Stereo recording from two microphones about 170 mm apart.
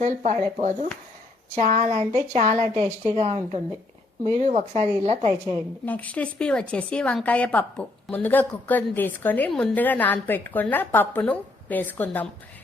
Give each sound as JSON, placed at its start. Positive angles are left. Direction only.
{"t": 0.0, "sound": "a woman's voice", "side_deg": -45}
{"t": 5.8, "sound": "a woman's voice", "side_deg": 10}